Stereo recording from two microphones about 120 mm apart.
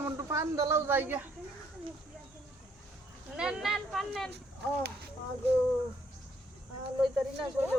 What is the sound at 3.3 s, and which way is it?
Speech, 5° right (ahead or behind).